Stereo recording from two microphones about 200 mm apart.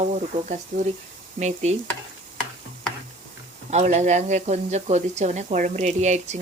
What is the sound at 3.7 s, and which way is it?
Speech, 35° right (ahead or behind).